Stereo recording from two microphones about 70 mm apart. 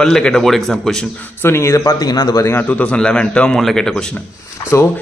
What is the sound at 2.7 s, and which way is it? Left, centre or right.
A man's voice, centre.